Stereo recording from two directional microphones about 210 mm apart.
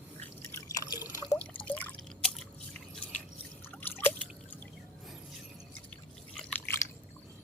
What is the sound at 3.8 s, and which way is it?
Drip, 10° left (ahead or behind).